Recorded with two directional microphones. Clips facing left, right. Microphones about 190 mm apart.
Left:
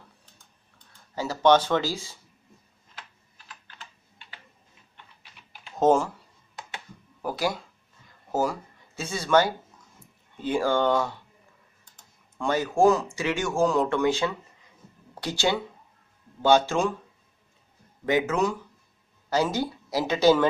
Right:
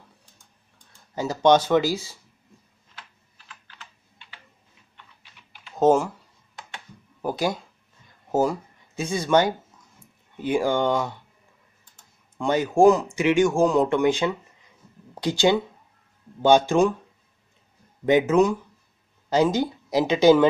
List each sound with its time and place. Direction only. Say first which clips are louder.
0.7 s speech: right 3 dB; 15° right (ahead or behind)
5.8 s speech: right 2 dB; 10° right (ahead or behind)
7.2 s speech: right 3 dB; 20° right (ahead or behind)
18.0 s speech: right 6 dB; 20° right (ahead or behind)